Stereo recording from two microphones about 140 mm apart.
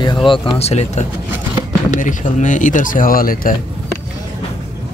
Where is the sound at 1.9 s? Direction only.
65° left (ahead or behind); by 3.5 s 90° left.